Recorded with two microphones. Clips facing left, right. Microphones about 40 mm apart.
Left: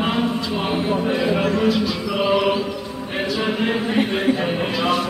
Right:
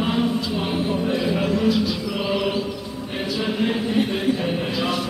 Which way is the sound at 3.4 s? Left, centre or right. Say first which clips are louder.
Even; centre.